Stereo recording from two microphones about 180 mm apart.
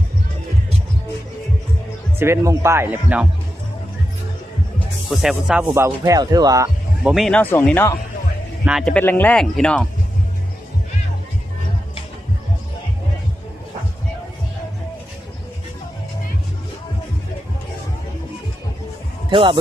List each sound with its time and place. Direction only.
2.1 s speech: 15° right (ahead or behind)
5.0 s speech: centre (ahead or behind)
5.7 s speech: 15° right (ahead or behind)
7.0 s speech: centre (ahead or behind)
8.6 s speech: centre (ahead or behind)
19.3 s speech: 30° right (ahead or behind)